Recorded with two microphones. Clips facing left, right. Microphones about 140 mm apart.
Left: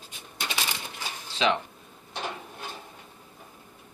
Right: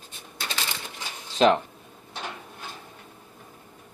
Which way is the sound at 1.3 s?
45° right (ahead or behind).